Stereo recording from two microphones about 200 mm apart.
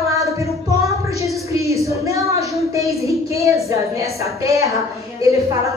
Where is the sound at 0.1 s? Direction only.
15° right (ahead or behind).